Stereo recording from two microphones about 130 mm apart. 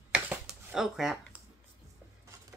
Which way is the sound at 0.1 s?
10° right (ahead or behind).